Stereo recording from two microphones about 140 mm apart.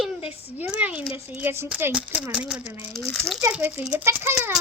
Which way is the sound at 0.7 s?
10° right (ahead or behind).